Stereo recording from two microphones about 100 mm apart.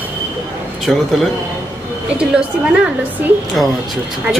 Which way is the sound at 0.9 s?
5° left (ahead or behind).